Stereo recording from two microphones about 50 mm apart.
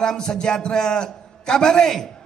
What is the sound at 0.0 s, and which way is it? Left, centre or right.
A man's voice, centre.